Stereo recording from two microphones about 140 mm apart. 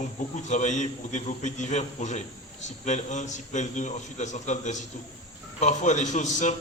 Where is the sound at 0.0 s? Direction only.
60° left (ahead or behind).